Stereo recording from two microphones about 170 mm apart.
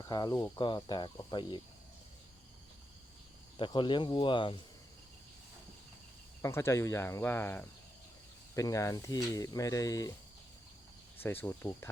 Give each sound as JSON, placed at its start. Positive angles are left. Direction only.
{"t": 0.0, "sound": "speech", "side_deg": 25}
{"t": 3.6, "sound": "speech", "side_deg": 25}
{"t": 6.4, "sound": "speech", "side_deg": 15}
{"t": 11.2, "sound": "speech", "side_deg": 15}